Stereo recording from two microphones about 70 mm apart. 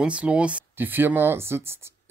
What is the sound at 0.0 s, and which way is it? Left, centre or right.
Speech, centre.